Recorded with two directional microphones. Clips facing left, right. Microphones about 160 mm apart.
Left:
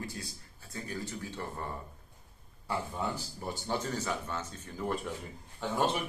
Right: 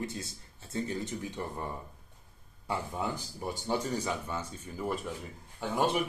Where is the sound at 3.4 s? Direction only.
10° right (ahead or behind).